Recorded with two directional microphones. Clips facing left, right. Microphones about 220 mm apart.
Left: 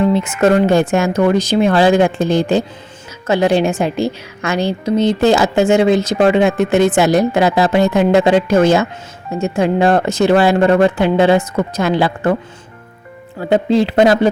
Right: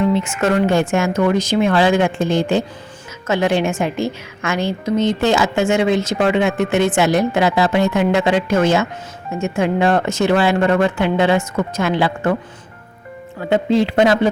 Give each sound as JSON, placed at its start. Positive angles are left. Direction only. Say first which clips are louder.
{"t": 0.1, "sound": "a woman's voice", "louder": "left 4 dB", "side_deg": 35}
{"t": 13.5, "sound": "a woman's voice", "louder": "left 2 dB", "side_deg": 35}